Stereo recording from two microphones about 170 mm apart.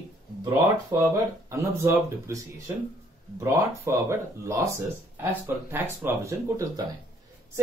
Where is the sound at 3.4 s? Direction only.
20° right (ahead or behind).